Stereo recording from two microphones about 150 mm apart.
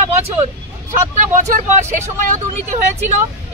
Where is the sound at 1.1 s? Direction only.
55° right (ahead or behind).